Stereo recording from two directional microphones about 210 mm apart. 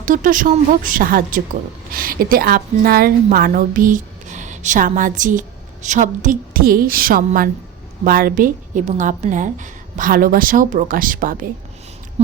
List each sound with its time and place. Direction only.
0.0 s a woman's voice: 40° right (ahead or behind)